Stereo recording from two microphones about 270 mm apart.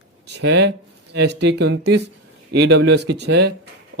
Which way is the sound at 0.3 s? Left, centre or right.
Right.